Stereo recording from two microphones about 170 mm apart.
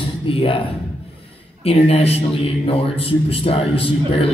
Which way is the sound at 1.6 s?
35° left (ahead or behind).